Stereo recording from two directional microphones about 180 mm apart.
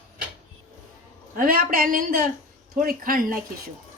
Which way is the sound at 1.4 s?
55° right (ahead or behind).